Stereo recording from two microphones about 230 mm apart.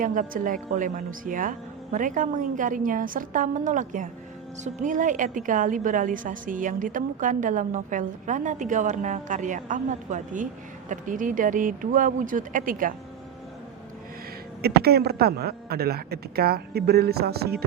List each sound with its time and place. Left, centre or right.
0.0 s a woman's voice: right
14.6 s a man's voice: right